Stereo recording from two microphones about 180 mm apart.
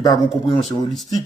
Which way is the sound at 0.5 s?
25° left (ahead or behind).